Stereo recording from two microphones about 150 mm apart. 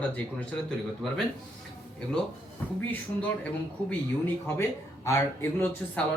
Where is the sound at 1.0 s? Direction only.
Centre (ahead or behind).